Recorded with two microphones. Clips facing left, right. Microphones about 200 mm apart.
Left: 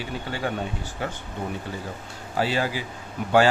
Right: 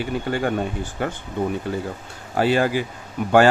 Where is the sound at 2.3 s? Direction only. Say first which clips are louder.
Right 6 dB; 55° right (ahead or behind).